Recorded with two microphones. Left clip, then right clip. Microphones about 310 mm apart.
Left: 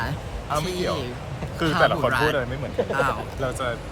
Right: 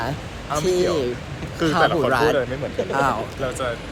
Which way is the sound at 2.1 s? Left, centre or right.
Centre.